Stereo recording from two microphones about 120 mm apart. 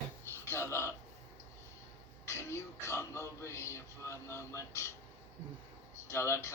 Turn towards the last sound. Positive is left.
turn(degrees=20)  # may be behind; listen again after turning